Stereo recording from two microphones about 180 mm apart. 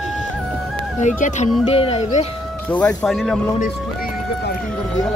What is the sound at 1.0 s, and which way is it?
Speech, 40° left (ahead or behind).